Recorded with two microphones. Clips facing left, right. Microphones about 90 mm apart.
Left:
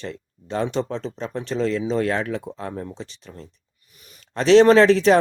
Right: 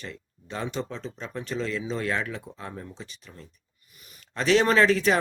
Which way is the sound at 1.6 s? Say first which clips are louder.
Left 9 dB; 50° left (ahead or behind).